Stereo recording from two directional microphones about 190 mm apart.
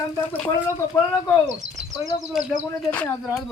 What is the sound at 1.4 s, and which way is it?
Speech, 75° right (ahead or behind).